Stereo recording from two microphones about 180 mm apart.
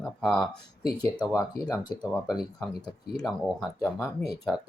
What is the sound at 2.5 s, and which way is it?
Speech, 20° left (ahead or behind).